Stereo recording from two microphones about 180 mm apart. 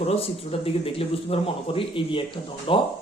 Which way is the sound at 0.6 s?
30° left (ahead or behind).